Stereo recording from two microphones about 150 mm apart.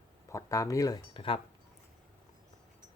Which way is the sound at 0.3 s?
20° left (ahead or behind).